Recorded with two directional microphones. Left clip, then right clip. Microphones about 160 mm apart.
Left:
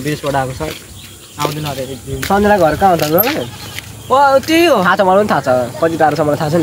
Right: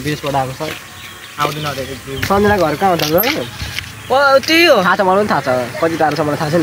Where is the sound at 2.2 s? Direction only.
35° left (ahead or behind).